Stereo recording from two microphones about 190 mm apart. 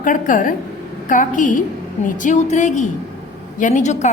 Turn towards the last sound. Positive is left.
turn(degrees=40)  # may be behind; listen again after turning